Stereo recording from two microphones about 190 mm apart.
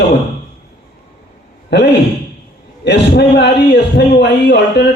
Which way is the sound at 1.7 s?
65° left (ahead or behind).